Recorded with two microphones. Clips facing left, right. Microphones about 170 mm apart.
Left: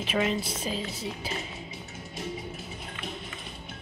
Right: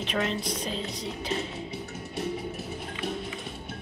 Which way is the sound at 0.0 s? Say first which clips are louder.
Left 1 dB; 5° left (ahead or behind).